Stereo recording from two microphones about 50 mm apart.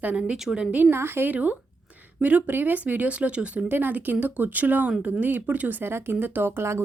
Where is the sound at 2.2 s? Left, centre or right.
Right.